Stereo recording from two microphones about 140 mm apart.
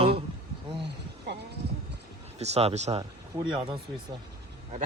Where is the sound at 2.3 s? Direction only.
50° right (ahead or behind).